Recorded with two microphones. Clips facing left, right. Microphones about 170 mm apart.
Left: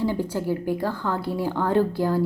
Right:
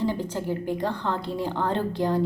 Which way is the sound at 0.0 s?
10° left (ahead or behind).